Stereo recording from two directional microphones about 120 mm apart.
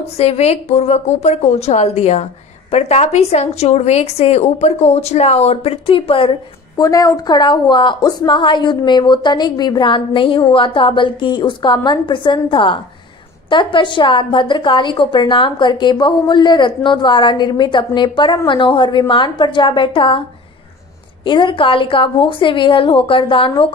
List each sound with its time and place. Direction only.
0.2 s a woman's voice: 60° left (ahead or behind)
6.8 s a woman's voice: 30° left (ahead or behind); by 23.5 s 45° left (ahead or behind)